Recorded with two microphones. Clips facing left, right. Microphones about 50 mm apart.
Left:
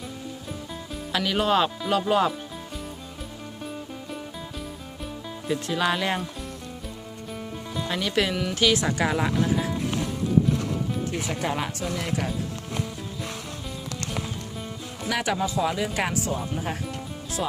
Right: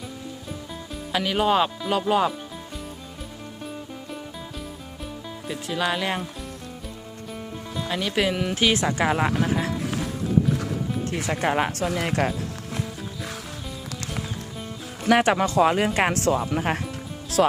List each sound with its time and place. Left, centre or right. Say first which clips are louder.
1.1 s speech: right 1 dB; centre
5.5 s speech: left 1 dB; centre
7.7 s a woman's voice: even; centre; by 9.6 s right
11.1 s speech: right 8 dB; right
15.1 s speech: right 8 dB; right
15.4 s speech: right 6 dB; right
16.5 s speech: right 5 dB; right